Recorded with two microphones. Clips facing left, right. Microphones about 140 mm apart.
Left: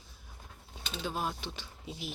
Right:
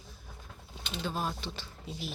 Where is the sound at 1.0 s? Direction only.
15° left (ahead or behind).